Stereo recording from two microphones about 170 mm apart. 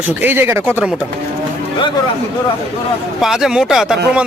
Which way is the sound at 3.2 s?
5° right (ahead or behind).